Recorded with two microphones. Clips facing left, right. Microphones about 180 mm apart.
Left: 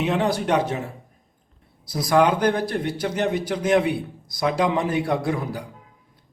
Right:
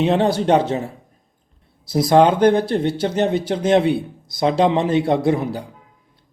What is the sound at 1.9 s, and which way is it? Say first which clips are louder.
A man's voice: right 5 dB; 25° right (ahead or behind).